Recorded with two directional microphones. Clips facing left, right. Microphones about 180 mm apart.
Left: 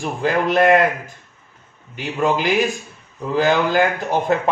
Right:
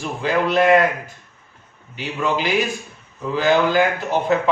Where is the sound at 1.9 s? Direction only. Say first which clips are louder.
Left 3 dB; 45° left (ahead or behind).